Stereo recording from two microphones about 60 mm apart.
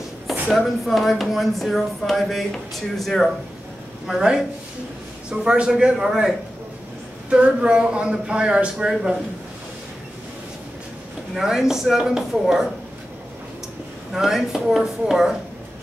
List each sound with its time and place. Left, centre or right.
0.3 s speech: centre
4.1 s speech: centre
11.3 s speech: centre
14.1 s speech: centre